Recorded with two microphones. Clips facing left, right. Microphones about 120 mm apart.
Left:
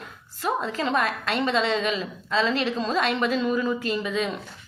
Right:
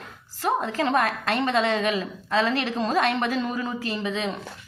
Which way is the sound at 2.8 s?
40° right (ahead or behind).